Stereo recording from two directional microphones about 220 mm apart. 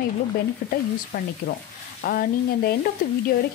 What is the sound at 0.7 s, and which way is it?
Speech, 40° left (ahead or behind).